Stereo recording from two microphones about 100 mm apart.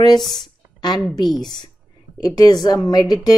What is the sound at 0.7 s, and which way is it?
A woman's voice, 45° left (ahead or behind).